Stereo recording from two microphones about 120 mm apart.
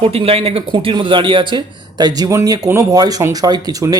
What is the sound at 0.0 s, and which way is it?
Speech, 55° right (ahead or behind).